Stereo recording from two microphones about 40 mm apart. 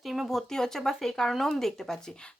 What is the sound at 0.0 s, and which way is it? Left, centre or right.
A woman's voice, centre.